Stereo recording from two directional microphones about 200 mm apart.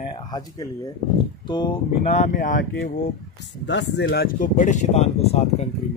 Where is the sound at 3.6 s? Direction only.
65° left (ahead or behind).